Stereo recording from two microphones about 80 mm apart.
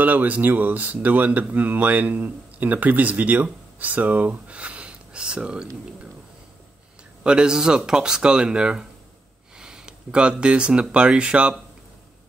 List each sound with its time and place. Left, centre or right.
0.0 s speech: right
7.2 s speech: centre